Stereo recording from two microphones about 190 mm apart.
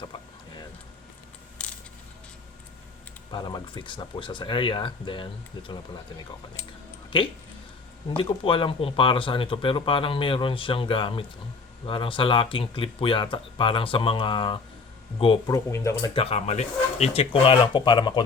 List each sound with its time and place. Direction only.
1.6 s a sound: 5° left (ahead or behind)
3.3 s speech: 25° left (ahead or behind)
8.1 s speech: 25° left (ahead or behind)
15.4 s speech: 15° left (ahead or behind)
16.1 s speech: 30° left (ahead or behind)